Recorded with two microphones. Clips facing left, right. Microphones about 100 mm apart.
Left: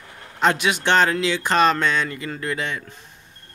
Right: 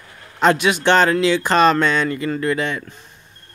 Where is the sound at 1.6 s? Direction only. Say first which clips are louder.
Right 2 dB; 50° right (ahead or behind).